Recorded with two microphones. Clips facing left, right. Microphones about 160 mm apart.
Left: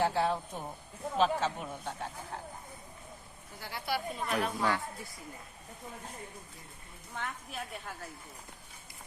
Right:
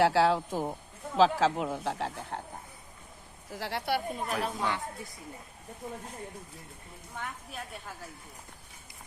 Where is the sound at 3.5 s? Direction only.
80° right; by 4.2 s 60° right (ahead or behind).